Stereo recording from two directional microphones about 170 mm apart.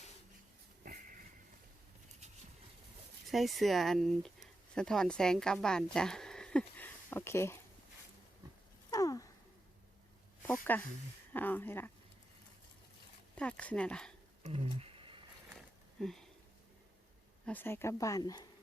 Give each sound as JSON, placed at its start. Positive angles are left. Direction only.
{"t": 3.2, "sound": "speech", "side_deg": 0}
{"t": 8.9, "sound": "a sound", "side_deg": 20}
{"t": 10.4, "sound": "speech", "side_deg": 10}
{"t": 13.3, "sound": "speech", "side_deg": 5}
{"t": 14.4, "sound": "a sound", "side_deg": -35}
{"t": 16.0, "sound": "sniff", "side_deg": 5}
{"t": 17.4, "sound": "speech", "side_deg": 10}